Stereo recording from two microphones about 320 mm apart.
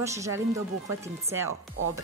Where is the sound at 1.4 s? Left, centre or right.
Right.